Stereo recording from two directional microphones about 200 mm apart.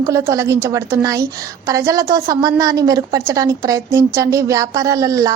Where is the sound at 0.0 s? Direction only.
15° right (ahead or behind).